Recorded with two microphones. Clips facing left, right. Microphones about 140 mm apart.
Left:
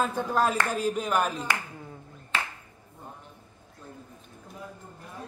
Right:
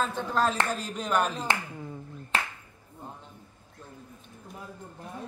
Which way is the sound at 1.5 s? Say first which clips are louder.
Right 1 dB; 25° right (ahead or behind).